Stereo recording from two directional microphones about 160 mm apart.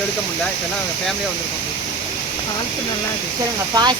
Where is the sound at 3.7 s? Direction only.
25° right (ahead or behind).